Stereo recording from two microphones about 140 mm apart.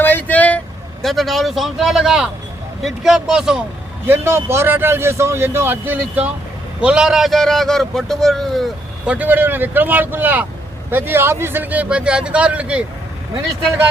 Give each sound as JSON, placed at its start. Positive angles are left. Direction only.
{"t": 0.0, "sound": "vehicle", "side_deg": 15}
{"t": 1.0, "sound": "a man's voice", "side_deg": 0}
{"t": 4.0, "sound": "a man's voice", "side_deg": -15}
{"t": 9.1, "sound": "a man's voice", "side_deg": -10}